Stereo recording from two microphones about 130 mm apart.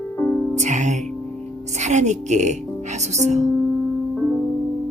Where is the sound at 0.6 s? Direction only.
65° right (ahead or behind).